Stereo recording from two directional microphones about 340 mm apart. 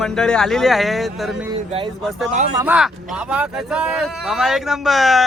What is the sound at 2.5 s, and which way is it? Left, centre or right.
Speech, centre.